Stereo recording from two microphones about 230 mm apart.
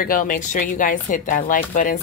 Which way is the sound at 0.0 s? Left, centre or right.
Left.